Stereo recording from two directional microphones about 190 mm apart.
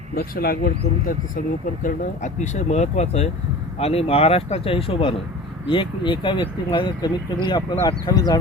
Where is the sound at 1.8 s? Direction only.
40° left (ahead or behind).